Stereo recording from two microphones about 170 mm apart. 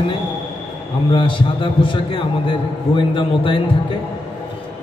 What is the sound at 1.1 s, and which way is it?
A man's voice, 30° left (ahead or behind).